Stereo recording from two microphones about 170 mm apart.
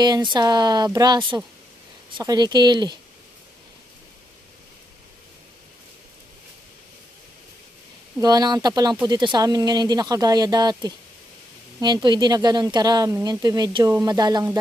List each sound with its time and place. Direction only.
0.0 s speech: 25° right (ahead or behind)
8.2 s speech: 25° right (ahead or behind)